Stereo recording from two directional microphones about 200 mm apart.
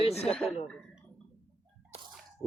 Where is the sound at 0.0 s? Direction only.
30° left (ahead or behind).